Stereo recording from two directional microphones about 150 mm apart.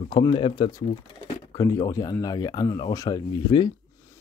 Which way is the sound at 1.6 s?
20° left (ahead or behind).